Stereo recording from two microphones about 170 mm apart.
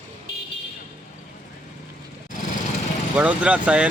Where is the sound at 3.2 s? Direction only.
5° right (ahead or behind).